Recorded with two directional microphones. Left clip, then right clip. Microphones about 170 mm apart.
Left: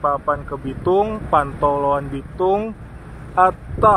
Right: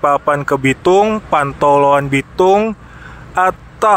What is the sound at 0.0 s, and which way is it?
Speech, 30° right (ahead or behind).